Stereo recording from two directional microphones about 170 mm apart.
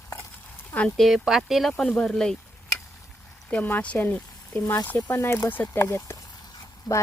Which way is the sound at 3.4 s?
10° left (ahead or behind).